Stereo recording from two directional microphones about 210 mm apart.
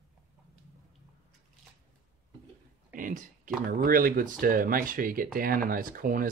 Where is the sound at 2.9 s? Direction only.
40° right (ahead or behind).